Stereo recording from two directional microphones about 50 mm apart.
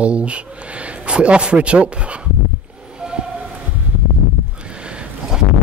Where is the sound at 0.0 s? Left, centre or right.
Right.